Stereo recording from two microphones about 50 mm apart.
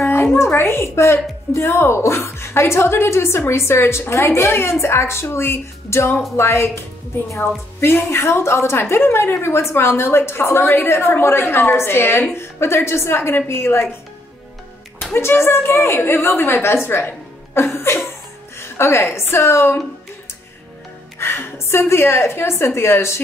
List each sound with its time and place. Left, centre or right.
0.0 s a woman's voice: left
7.8 s a woman's voice: left
15.1 s a woman's voice: left
16.0 s a woman's voice: left
21.2 s a woman's voice: left